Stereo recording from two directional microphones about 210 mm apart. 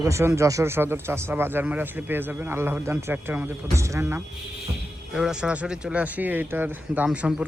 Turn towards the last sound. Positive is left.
turn(degrees=-5)  # may be behind; listen again after turning